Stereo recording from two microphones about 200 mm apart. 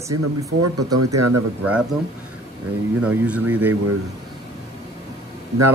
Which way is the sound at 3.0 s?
5° right (ahead or behind).